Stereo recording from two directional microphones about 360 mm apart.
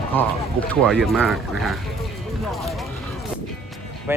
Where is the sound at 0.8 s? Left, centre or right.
Centre.